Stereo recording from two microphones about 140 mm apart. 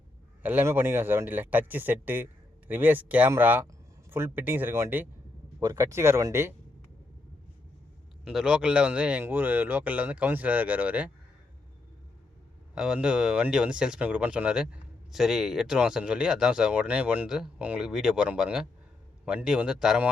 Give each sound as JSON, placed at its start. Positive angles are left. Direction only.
{"t": 0.4, "sound": "a man's voice", "side_deg": -15}
{"t": 8.2, "sound": "a man's voice", "side_deg": -5}
{"t": 12.7, "sound": "a man's voice", "side_deg": -5}